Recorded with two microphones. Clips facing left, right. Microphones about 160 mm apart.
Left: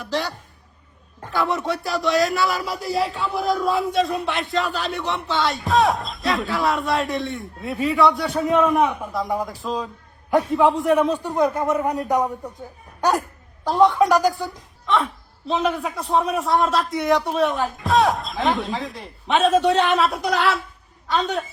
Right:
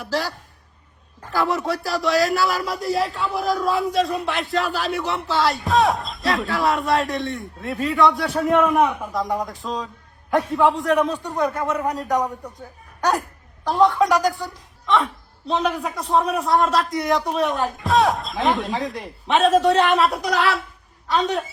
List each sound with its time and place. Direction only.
0.0 s a woman's voice: centre (ahead or behind)
10.8 s speech: 20° left (ahead or behind)
13.7 s a woman's voice: centre (ahead or behind)